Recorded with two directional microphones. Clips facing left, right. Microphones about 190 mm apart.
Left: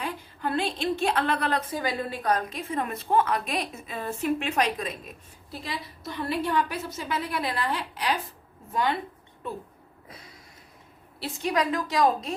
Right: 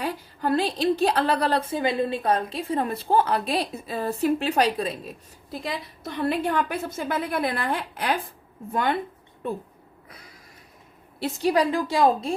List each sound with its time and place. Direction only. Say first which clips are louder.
0.0 s a woman's voice: right 4 dB; 40° right (ahead or behind)
6.2 s a woman's voice: right 3 dB; 55° right (ahead or behind)
11.2 s a woman's voice: right 5 dB; 35° right (ahead or behind)